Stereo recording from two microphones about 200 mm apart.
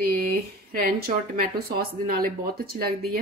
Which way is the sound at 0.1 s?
50° right (ahead or behind).